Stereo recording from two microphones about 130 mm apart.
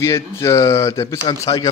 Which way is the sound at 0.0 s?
25° left (ahead or behind).